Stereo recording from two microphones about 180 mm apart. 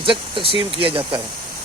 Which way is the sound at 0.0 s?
30° right (ahead or behind).